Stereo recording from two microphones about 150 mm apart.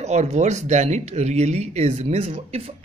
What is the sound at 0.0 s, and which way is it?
Speech, 50° right (ahead or behind).